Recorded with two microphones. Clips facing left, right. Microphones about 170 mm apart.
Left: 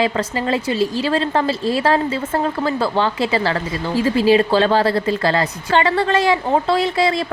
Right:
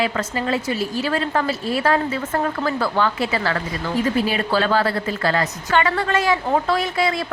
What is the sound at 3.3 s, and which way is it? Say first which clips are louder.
Speech: left 4 dB; 35° left (ahead or behind).